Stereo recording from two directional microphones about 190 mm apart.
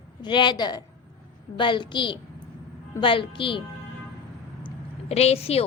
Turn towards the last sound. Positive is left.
turn(degrees=30)  # may be behind; listen again after turning